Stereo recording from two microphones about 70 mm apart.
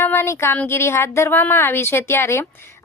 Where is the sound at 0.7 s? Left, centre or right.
Left.